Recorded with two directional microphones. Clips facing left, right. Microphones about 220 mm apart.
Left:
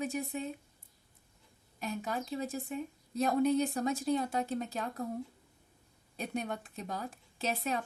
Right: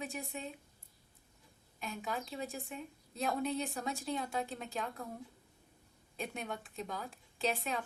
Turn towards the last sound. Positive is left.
turn(degrees=40)  # may be behind; listen again after turning